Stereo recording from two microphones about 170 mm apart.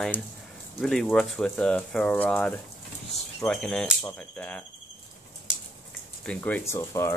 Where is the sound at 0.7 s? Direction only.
Centre (ahead or behind).